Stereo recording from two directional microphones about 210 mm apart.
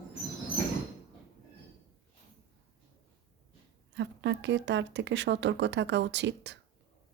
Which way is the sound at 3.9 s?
55° right (ahead or behind).